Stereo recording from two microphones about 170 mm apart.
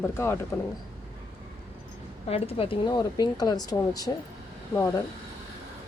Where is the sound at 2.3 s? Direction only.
35° left (ahead or behind).